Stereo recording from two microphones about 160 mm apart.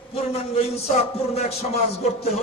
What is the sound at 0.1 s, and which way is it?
A man's voice, 40° left (ahead or behind).